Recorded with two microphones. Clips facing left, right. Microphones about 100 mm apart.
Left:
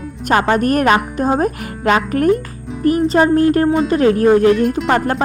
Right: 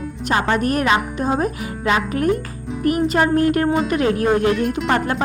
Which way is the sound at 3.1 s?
30° left (ahead or behind).